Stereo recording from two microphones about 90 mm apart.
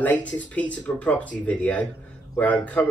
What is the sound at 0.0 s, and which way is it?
Speech, 15° left (ahead or behind).